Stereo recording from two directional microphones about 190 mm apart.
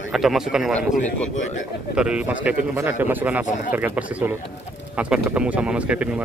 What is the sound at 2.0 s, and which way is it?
Speech, 5° right (ahead or behind).